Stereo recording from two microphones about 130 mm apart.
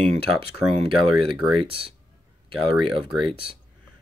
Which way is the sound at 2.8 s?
45° right (ahead or behind).